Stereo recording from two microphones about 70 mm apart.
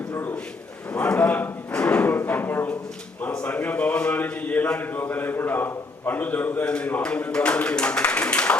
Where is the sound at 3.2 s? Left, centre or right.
Left.